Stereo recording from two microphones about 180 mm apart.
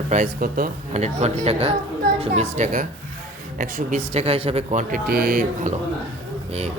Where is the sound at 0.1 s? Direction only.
45° right (ahead or behind).